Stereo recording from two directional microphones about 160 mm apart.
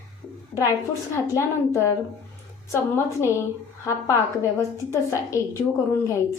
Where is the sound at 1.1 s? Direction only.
15° left (ahead or behind).